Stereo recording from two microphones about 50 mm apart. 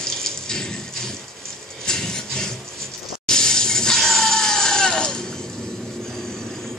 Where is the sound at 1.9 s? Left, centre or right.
Centre.